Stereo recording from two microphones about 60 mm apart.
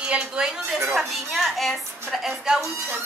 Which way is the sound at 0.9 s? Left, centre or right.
Centre.